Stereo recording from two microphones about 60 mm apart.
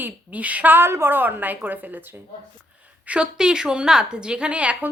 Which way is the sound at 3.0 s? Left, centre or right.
Centre.